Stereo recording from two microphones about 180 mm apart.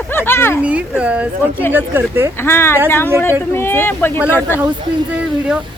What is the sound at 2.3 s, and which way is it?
Speech, 15° left (ahead or behind).